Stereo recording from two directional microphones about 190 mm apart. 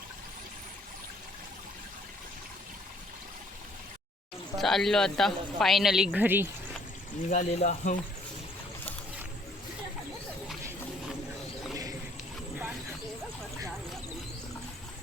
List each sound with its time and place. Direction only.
4.5 s speech: centre (ahead or behind)
7.3 s speech: 45° left (ahead or behind)